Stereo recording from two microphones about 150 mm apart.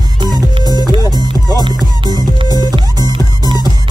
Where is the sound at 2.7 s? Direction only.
30° right (ahead or behind).